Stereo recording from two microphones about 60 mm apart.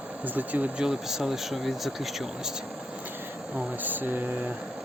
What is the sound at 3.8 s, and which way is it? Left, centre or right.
Speech, right.